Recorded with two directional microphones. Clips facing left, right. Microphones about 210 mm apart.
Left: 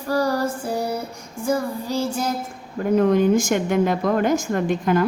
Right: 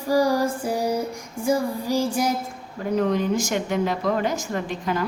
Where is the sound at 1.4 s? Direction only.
10° right (ahead or behind).